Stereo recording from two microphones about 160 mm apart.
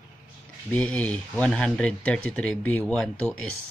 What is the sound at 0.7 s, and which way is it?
Speech, 5° left (ahead or behind).